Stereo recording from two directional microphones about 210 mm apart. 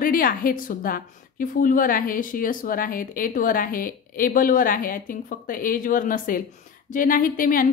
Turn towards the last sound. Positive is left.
turn(degrees=40)  # may be behind; listen again after turning